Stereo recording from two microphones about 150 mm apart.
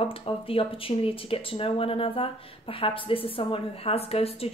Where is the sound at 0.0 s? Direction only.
40° left (ahead or behind).